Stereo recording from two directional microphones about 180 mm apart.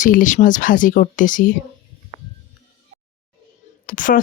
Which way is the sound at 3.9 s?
50° left (ahead or behind).